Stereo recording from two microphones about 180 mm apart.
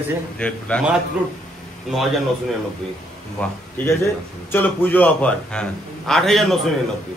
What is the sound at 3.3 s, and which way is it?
A man's voice, 10° left (ahead or behind).